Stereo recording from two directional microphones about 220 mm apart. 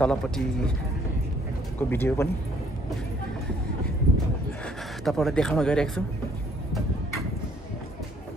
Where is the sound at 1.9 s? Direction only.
10° left (ahead or behind).